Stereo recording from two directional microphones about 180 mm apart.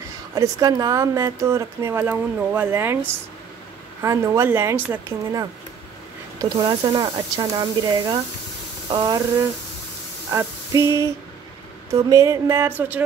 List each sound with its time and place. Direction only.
0.3 s speech: 20° right (ahead or behind)
4.0 s speech: 15° right (ahead or behind)